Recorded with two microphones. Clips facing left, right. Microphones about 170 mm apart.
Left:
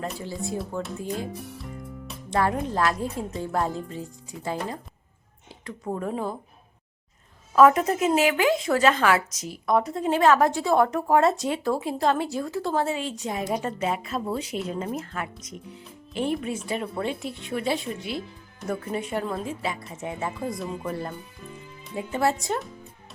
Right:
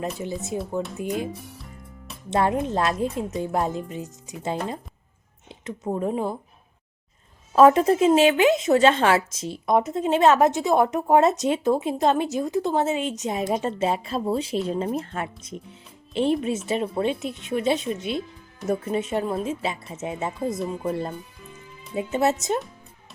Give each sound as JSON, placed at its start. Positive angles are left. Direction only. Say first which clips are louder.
{"t": 0.0, "sound": "speech", "louder": "right 2 dB", "side_deg": -20}
{"t": 1.5, "sound": "music", "louder": "left 6 dB", "side_deg": 0}
{"t": 2.3, "sound": "speech", "louder": "right 2 dB", "side_deg": -25}
{"t": 7.5, "sound": "speech", "louder": "right 2 dB", "side_deg": -25}